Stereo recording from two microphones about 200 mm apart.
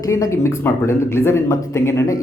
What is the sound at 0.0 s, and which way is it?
Speech, 15° left (ahead or behind).